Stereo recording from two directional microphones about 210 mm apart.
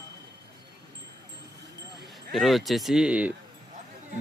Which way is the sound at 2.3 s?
Centre (ahead or behind).